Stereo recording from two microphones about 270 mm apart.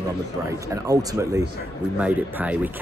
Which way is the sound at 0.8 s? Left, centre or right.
Centre.